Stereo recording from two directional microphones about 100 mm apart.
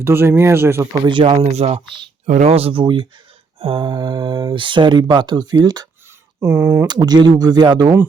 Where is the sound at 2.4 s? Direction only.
85° right.